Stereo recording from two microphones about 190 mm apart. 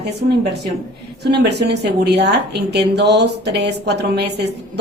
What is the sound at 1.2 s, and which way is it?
A woman's voice, 60° right (ahead or behind).